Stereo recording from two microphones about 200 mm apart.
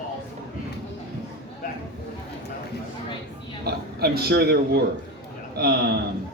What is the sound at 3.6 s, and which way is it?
Speech, 50° right (ahead or behind).